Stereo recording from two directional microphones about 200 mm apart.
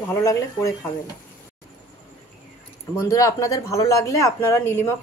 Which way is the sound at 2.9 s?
15° left (ahead or behind).